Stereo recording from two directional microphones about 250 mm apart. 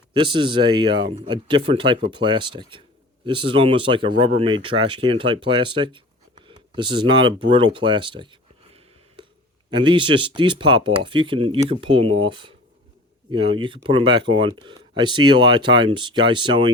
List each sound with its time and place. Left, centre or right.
0.1 s speech: centre